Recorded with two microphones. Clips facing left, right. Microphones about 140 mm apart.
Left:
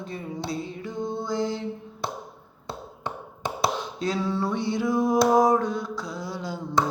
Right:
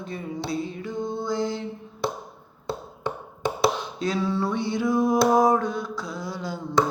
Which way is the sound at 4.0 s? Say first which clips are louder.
Right 2 dB; 35° left (ahead or behind).